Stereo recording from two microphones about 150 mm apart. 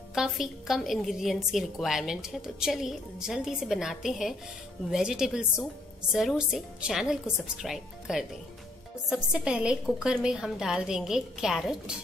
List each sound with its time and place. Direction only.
0.1 s a woman's voice: 5° right (ahead or behind)